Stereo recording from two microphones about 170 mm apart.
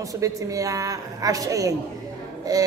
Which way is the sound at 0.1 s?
20° right (ahead or behind).